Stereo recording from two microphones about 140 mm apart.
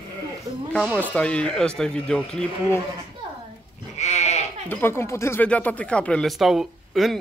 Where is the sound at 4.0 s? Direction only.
50° left (ahead or behind).